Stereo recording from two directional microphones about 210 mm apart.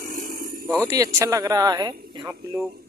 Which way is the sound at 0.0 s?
40° right (ahead or behind).